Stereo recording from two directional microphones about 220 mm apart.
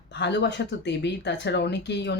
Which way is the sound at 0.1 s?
50° left (ahead or behind).